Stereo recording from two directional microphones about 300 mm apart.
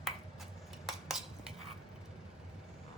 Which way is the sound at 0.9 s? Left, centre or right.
Centre.